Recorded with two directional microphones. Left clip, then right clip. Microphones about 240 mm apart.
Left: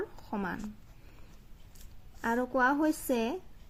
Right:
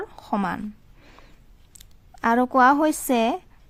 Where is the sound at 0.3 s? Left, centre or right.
Right.